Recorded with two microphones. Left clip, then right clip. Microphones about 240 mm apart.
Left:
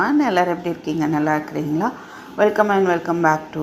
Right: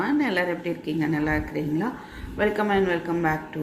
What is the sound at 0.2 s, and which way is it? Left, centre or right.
A woman's voice, centre.